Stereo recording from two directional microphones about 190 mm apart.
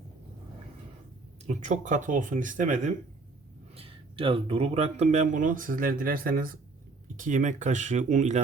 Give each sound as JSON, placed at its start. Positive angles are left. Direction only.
{"t": 1.5, "sound": "speech", "side_deg": -40}
{"t": 3.8, "sound": "speech", "side_deg": -30}